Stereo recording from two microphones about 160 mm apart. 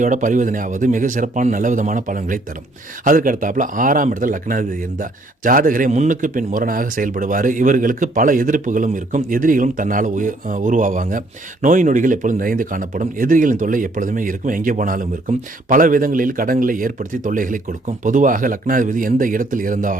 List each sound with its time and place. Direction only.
0.0 s a man's voice: 50° right (ahead or behind)